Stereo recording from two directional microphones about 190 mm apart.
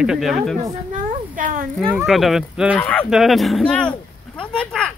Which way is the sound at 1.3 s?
45° right (ahead or behind).